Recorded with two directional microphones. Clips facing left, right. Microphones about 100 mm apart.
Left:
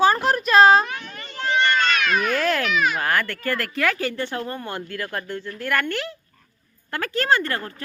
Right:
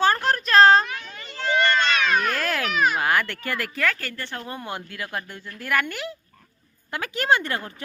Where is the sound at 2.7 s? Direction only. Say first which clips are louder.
Even; 40° right (ahead or behind).